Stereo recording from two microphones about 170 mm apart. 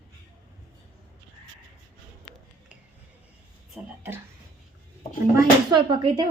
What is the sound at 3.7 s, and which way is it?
Speech, 10° right (ahead or behind).